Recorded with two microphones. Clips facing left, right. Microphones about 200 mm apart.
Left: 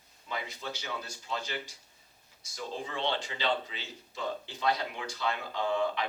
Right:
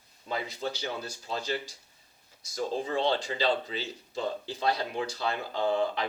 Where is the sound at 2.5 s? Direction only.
40° right (ahead or behind).